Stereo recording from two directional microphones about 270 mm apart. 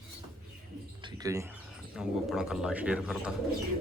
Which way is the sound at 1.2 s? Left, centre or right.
Centre.